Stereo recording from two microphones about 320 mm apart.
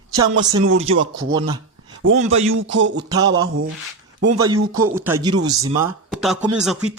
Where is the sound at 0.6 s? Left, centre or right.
Right.